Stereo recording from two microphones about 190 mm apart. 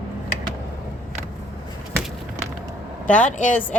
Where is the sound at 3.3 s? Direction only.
40° left (ahead or behind).